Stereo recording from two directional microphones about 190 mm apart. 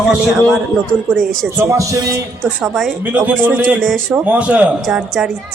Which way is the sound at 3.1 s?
10° right (ahead or behind).